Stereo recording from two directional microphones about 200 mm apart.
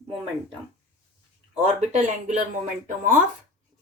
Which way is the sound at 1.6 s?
35° right (ahead or behind).